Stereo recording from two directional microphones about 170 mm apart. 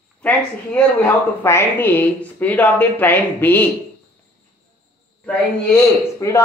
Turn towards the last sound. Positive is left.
turn(degrees=15)  # may be behind; listen again after turning